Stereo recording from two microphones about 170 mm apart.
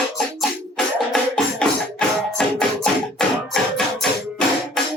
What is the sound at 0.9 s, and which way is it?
Music, 5° left (ahead or behind).